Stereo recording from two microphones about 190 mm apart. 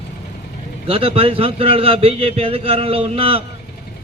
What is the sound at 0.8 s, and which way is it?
A man's voice, 30° right (ahead or behind).